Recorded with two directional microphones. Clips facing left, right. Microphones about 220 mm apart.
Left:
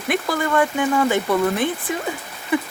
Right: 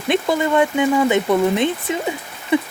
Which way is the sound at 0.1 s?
20° right (ahead or behind).